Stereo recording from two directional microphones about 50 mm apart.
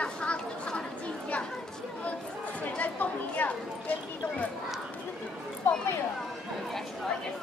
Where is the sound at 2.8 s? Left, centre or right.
Left.